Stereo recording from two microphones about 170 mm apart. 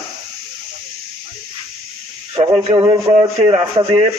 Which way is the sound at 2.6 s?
30° right (ahead or behind).